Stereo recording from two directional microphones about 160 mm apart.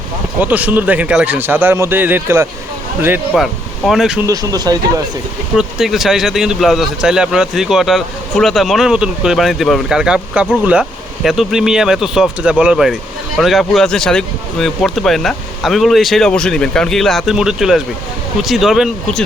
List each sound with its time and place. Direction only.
0.3 s speech: 10° right (ahead or behind)
3.3 s speech: centre (ahead or behind)
4.3 s speech: 25° right (ahead or behind)
5.5 s speech: 5° right (ahead or behind)